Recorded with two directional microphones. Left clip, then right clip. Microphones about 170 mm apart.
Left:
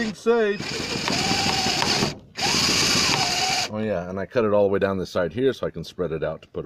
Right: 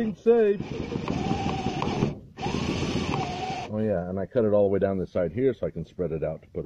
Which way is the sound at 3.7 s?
25° left (ahead or behind).